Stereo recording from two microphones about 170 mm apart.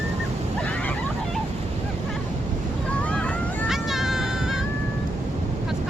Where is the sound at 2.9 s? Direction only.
5° left (ahead or behind).